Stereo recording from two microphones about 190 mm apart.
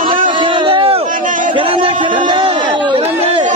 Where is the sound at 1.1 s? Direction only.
45° right (ahead or behind).